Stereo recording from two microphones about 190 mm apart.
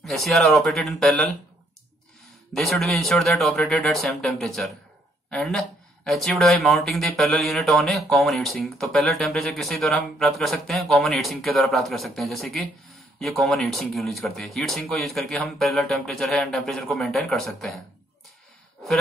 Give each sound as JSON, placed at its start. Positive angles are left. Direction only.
{"t": 0.0, "sound": "speech", "side_deg": 0}
{"t": 2.5, "sound": "speech", "side_deg": 0}